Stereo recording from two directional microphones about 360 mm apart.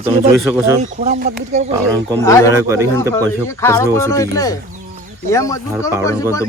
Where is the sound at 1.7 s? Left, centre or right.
Centre.